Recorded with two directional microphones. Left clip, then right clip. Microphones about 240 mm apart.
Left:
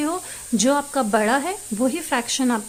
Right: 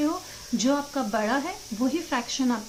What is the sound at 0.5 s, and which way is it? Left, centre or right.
A woman's voice, left.